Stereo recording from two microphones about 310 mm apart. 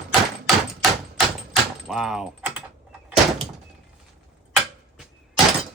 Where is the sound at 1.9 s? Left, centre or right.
Centre.